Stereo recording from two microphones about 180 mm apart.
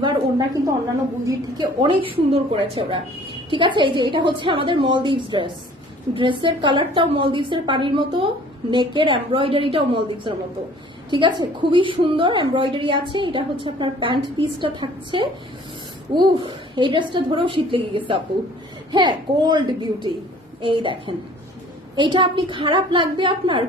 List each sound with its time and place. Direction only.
0.0 s a woman's voice: 25° right (ahead or behind)